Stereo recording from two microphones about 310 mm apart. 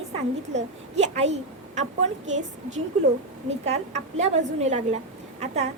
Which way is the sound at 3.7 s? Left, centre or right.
Right.